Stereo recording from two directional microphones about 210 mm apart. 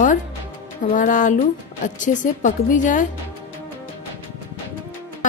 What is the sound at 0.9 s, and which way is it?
Speech, 40° left (ahead or behind).